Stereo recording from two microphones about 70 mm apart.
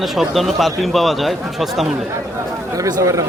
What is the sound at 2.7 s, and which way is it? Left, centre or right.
Speech, right.